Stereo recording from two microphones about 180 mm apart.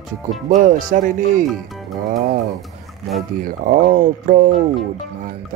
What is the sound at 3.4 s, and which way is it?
Speech, 50° right (ahead or behind).